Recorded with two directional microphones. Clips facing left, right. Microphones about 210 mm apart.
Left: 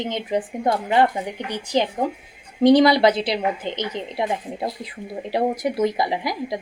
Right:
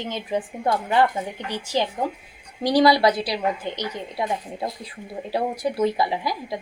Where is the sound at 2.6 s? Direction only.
20° left (ahead or behind).